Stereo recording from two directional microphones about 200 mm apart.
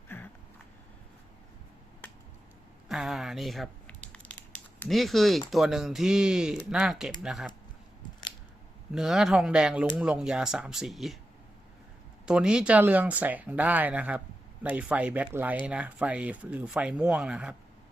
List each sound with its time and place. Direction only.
0.1 s a sound: 10° left (ahead or behind)
2.9 s crumpling: centre (ahead or behind)
4.9 s speech: centre (ahead or behind)
8.9 s speech: centre (ahead or behind)
12.2 s speech: 5° right (ahead or behind)